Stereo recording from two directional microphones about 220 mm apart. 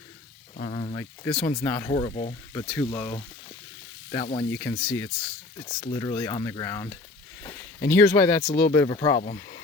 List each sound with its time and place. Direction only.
0.7 s a sound: 25° left (ahead or behind)
0.9 s stir: 10° left (ahead or behind)
1.9 s sizzle: 20° left (ahead or behind)
2.5 s stir: 10° left (ahead or behind)
4.1 s sizzle: 20° left (ahead or behind)
4.5 s stir: 10° left (ahead or behind)
7.4 s a sound: 10° left (ahead or behind)
7.9 s stir: 15° left (ahead or behind)
8.4 s speech: 40° left (ahead or behind)
8.7 s stir: 15° left (ahead or behind)